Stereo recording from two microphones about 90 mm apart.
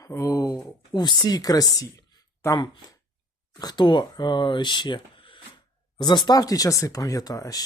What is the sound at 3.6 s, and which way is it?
Speech, 50° left (ahead or behind).